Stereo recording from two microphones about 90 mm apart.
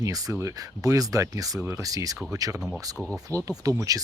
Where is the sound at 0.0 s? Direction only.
40° right (ahead or behind).